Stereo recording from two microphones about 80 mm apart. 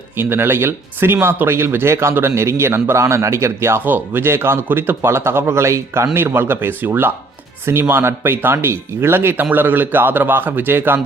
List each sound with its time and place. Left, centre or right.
0.2 s speech: right